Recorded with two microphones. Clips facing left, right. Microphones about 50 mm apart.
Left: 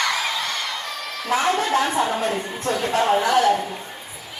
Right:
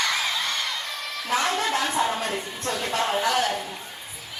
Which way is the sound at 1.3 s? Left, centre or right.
Left.